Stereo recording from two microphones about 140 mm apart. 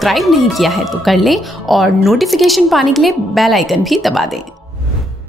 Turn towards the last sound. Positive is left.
turn(degrees=0)  # may be behind; listen again after turning